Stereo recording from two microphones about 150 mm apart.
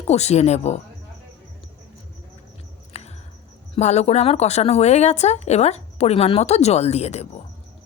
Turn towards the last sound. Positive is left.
turn(degrees=45)  # may be behind; listen again after turning